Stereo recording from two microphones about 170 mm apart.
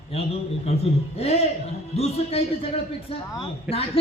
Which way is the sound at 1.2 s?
40° left (ahead or behind).